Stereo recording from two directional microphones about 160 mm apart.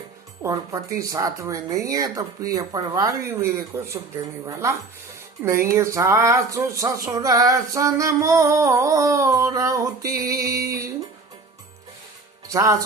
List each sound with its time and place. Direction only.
0.4 s speech: 20° right (ahead or behind)
5.4 s speech: 15° right (ahead or behind)
10.5 s music: 70° right (ahead or behind)
12.5 s speech: 20° right (ahead or behind)